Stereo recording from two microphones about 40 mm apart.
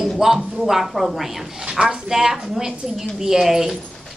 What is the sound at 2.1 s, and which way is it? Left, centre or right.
Speech, centre.